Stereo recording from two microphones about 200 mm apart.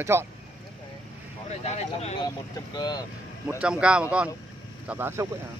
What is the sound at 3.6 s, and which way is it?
Speech, 5° right (ahead or behind).